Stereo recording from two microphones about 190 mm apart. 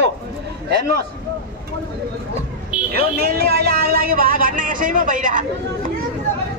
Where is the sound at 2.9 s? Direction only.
55° right (ahead or behind).